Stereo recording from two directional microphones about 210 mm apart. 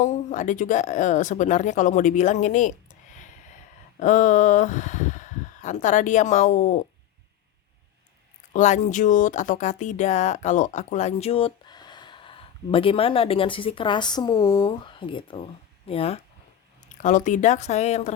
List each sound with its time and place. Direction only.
0.0 s speech: 35° left (ahead or behind)
4.0 s speech: 35° left (ahead or behind)
8.5 s speech: 35° left (ahead or behind)